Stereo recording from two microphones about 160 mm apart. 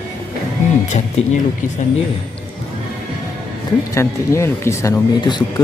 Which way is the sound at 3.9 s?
15° left (ahead or behind).